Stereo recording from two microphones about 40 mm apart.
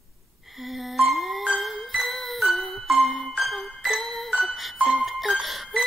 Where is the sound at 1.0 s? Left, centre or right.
Centre.